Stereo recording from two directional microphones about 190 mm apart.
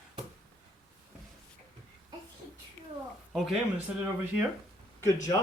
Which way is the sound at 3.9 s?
5° right (ahead or behind).